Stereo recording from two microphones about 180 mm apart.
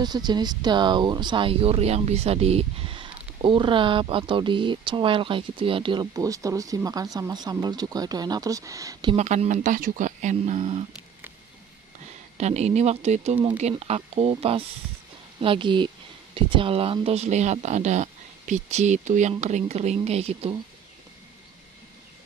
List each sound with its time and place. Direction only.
0.0 s speech: 25° right (ahead or behind)
9.1 s speech: 40° right (ahead or behind)
12.4 s speech: 35° right (ahead or behind)